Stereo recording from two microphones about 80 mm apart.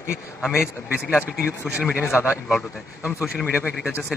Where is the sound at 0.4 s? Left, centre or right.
Centre.